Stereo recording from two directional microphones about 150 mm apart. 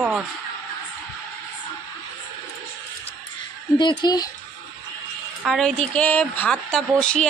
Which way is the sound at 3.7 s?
30° left (ahead or behind).